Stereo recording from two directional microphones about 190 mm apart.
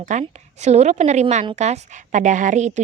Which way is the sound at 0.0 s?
40° right (ahead or behind).